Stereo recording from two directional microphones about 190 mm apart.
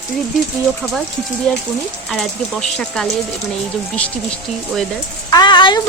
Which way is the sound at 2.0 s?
5° left (ahead or behind).